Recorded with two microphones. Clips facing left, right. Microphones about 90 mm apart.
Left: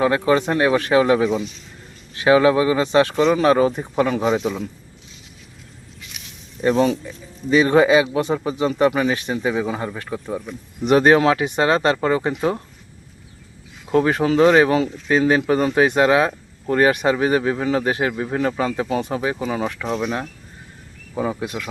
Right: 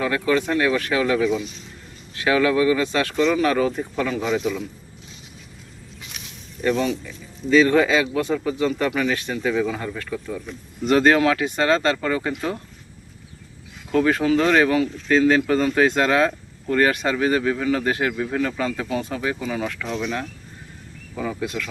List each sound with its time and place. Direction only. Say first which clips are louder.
0.0 s speech: left 4 dB; 25° left (ahead or behind)
4.1 s a man's voice: left 3 dB; 35° left (ahead or behind)
6.6 s a man's voice: left 4 dB; 30° left (ahead or behind)
13.9 s speech: left 2 dB; 20° left (ahead or behind)
21.2 s speech: left 3 dB; 25° left (ahead or behind)